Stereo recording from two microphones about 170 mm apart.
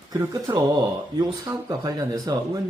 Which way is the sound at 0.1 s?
20° right (ahead or behind).